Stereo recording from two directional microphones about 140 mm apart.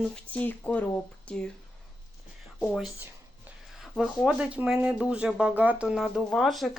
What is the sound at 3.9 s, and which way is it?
Speech, centre (ahead or behind).